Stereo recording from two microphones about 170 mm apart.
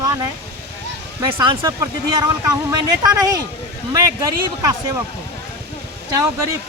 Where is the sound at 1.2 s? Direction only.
25° right (ahead or behind).